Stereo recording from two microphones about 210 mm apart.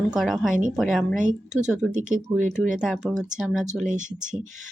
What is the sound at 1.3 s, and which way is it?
Speech, 35° right (ahead or behind).